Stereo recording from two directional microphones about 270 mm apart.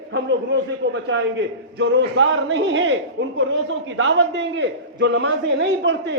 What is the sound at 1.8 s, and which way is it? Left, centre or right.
A man's voice, right.